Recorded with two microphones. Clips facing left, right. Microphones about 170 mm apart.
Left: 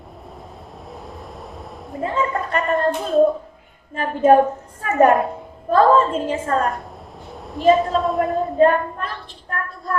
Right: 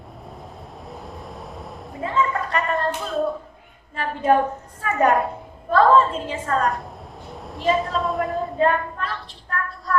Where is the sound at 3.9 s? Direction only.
45° left (ahead or behind).